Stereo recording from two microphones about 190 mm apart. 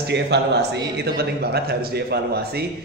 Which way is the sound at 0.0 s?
65° right (ahead or behind).